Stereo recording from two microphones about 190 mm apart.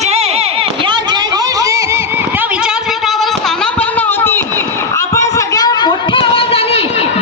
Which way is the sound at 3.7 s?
10° left (ahead or behind).